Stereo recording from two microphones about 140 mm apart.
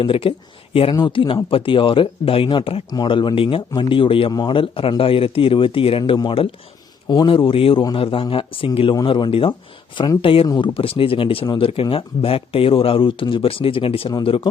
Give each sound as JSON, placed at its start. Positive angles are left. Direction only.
{"t": 0.0, "sound": "speech", "side_deg": 40}